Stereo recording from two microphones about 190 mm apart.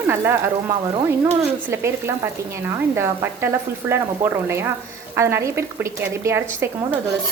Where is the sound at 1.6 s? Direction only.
15° right (ahead or behind).